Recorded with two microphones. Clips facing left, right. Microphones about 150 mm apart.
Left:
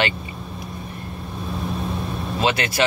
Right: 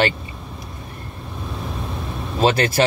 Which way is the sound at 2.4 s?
40° right (ahead or behind).